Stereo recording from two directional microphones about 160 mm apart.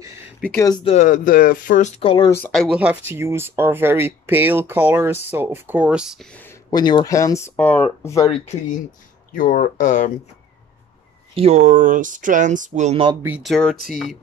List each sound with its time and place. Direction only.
0.4 s speech: 10° left (ahead or behind)
0.8 s speech: 50° left (ahead or behind)
2.2 s speech: 15° left (ahead or behind)
2.5 s speech: centre (ahead or behind)
6.3 s a sound: 15° left (ahead or behind)
6.7 s speech: 25° left (ahead or behind)
9.3 s speech: 55° left (ahead or behind)
11.3 s speech: 45° right (ahead or behind)
13.4 s speech: 5° left (ahead or behind)